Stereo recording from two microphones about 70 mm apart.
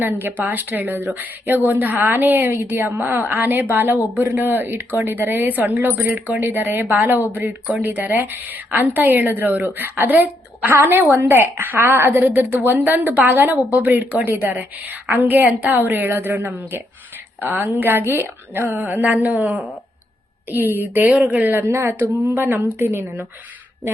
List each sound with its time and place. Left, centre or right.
0.0 s a woman's voice: right